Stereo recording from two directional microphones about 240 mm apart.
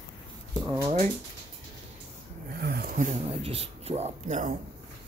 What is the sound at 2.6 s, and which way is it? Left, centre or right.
Speech, right.